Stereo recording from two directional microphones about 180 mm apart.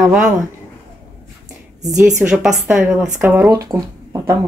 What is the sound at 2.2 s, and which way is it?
A woman's voice, 5° right (ahead or behind).